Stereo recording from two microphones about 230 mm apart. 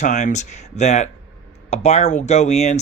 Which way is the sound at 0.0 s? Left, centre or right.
Left.